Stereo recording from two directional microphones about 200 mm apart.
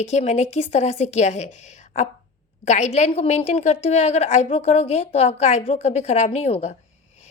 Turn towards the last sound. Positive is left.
turn(degrees=35)  # may be behind; listen again after turning